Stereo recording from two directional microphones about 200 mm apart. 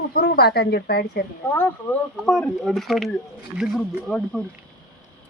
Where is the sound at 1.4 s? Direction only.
10° left (ahead or behind).